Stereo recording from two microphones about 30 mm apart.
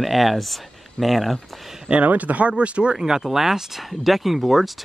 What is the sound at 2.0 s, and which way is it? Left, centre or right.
Speech, right.